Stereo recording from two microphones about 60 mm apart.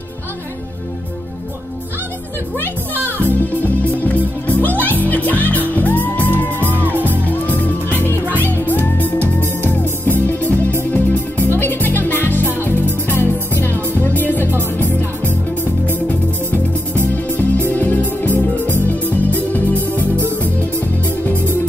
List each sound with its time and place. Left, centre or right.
2.9 s music: right
3.2 s music: left
6.4 s music: right
7.2 s music: left
19.9 s music: right